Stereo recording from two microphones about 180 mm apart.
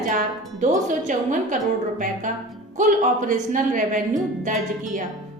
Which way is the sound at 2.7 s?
45° right (ahead or behind).